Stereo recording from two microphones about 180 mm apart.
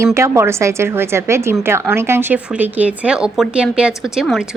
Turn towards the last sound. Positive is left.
turn(degrees=0)  # may be behind; listen again after turning